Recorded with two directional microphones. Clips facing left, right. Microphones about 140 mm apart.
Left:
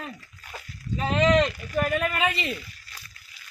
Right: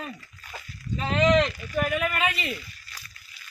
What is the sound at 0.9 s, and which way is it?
Speech, 5° left (ahead or behind).